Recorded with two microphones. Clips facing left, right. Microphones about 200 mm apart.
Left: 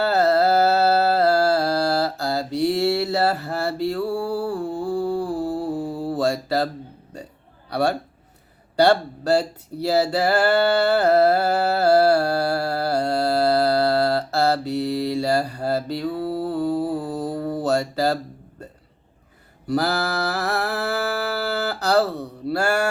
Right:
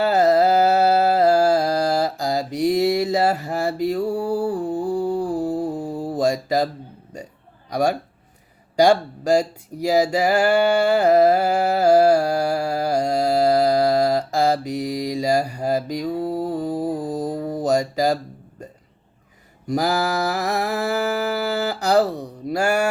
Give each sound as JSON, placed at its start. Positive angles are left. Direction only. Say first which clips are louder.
{"t": 0.0, "sound": "music", "louder": "right 2 dB", "side_deg": -15}
{"t": 7.7, "sound": "a man's voice", "louder": "right 1 dB", "side_deg": -15}
{"t": 19.6, "sound": "mantra", "louder": "right 1 dB", "side_deg": -15}